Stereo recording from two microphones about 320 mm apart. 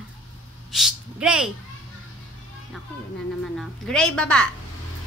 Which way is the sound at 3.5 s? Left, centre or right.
Centre.